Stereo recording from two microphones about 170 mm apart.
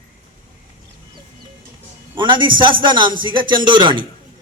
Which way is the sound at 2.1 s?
30° right (ahead or behind).